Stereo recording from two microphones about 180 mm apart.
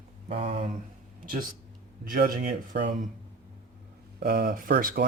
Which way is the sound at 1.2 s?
50° right (ahead or behind).